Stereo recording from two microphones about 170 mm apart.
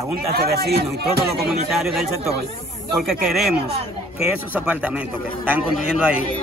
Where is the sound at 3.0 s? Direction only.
Centre (ahead or behind).